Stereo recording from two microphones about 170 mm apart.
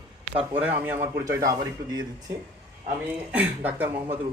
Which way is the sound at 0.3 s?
10° right (ahead or behind).